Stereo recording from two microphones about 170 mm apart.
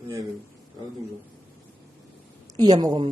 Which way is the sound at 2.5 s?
25° right (ahead or behind).